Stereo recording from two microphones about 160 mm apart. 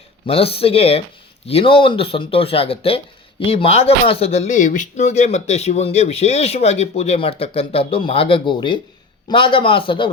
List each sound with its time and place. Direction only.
0.3 s speech: 35° left (ahead or behind)